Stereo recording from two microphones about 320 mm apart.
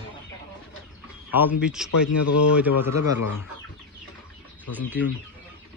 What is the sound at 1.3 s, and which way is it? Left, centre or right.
A man's voice, centre.